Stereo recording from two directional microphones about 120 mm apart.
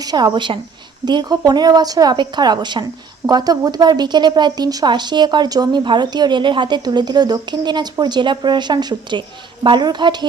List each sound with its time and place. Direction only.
0.0 s speech: 35° right (ahead or behind)